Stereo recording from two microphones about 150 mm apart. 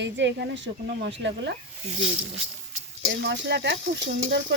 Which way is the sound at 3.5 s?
90° right.